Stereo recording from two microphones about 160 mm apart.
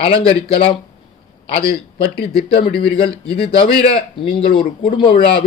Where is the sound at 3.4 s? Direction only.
35° left (ahead or behind).